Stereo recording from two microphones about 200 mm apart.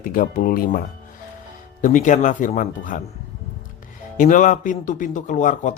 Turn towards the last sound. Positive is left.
turn(degrees=40)  # may be behind; listen again after turning